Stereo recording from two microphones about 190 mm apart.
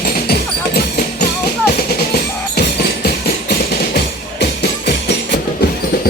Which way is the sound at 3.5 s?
55° left (ahead or behind).